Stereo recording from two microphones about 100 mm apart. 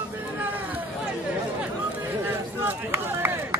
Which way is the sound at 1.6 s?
20° right (ahead or behind).